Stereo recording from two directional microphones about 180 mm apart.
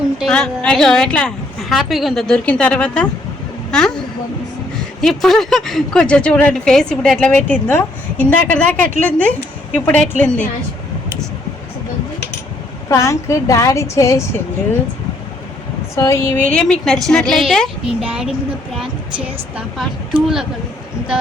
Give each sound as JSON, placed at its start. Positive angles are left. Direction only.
{"t": 0.2, "sound": "a woman's voice", "side_deg": 5}
{"t": 12.9, "sound": "a woman's voice", "side_deg": 15}
{"t": 16.0, "sound": "a woman's voice", "side_deg": 15}